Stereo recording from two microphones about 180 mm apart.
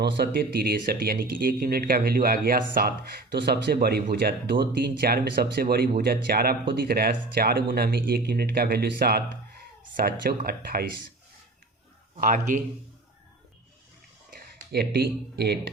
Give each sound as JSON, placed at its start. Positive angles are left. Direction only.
{"t": 0.0, "sound": "speech", "side_deg": -60}
{"t": 12.2, "sound": "a man's voice", "side_deg": -45}
{"t": 14.7, "sound": "speech", "side_deg": -65}